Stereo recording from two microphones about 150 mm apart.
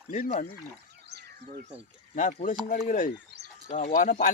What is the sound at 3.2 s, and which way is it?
Bird, 90° right.